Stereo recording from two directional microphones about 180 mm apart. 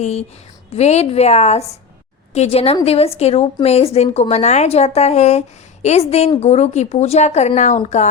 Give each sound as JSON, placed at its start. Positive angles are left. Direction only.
{"t": 0.0, "sound": "a woman's voice", "side_deg": 35}